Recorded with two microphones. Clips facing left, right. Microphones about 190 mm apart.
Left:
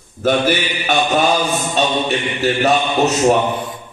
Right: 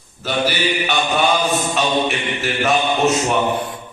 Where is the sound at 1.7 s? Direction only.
35° left (ahead or behind).